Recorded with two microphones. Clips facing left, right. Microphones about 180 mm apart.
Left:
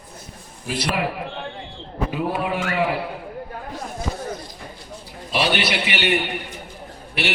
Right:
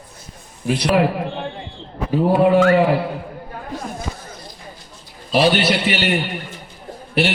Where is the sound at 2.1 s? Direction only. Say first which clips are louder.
Right 12 dB; 45° right (ahead or behind).